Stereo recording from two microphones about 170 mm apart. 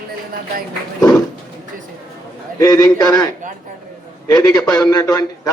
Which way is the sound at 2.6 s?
20° left (ahead or behind).